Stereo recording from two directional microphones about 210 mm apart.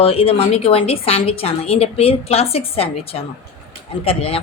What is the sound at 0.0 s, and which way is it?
A woman's voice, 25° left (ahead or behind).